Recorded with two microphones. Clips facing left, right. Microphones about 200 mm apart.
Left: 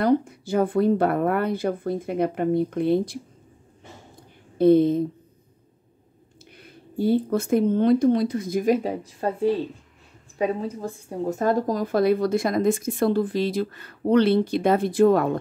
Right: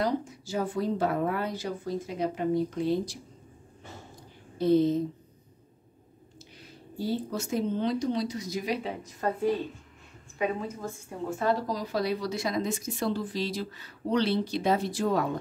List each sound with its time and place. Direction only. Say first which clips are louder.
0.0 s speech: left 8 dB; 55° left (ahead or behind)
4.6 s speech: left 7 dB; 55° left (ahead or behind)
6.6 s speech: left 9 dB; 55° left (ahead or behind)
9.0 s speech: left 5 dB; 30° left (ahead or behind); by 15.3 s 55° left (ahead or behind)